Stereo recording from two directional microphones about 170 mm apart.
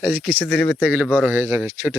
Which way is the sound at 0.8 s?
5° right (ahead or behind).